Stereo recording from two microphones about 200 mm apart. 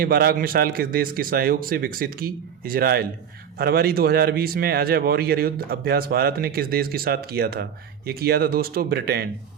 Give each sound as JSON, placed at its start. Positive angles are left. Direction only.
{"t": 0.0, "sound": "speech", "side_deg": -50}